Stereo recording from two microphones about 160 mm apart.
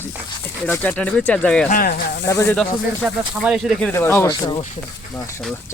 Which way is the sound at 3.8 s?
15° left (ahead or behind).